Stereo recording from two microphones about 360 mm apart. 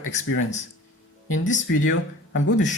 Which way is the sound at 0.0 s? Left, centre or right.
Left.